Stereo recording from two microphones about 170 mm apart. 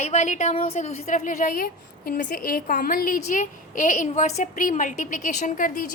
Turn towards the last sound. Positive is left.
turn(degrees=50)  # may be behind; listen again after turning